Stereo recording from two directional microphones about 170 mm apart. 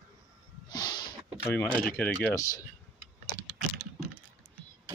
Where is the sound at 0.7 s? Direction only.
25° left (ahead or behind).